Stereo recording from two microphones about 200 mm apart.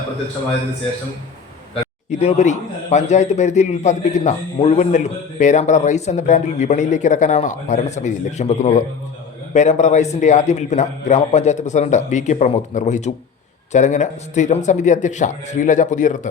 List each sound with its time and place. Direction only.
1.7 s a man's voice: 30° left (ahead or behind)